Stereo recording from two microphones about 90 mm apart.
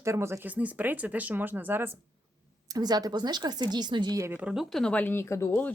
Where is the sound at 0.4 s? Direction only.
15° right (ahead or behind).